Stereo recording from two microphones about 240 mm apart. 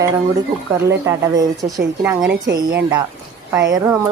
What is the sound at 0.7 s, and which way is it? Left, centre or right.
Speech, centre.